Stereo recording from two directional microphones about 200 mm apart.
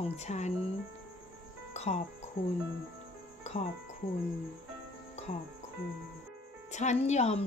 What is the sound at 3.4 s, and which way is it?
Music, 35° left (ahead or behind).